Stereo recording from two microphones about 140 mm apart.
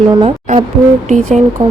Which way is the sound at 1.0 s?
55° right (ahead or behind).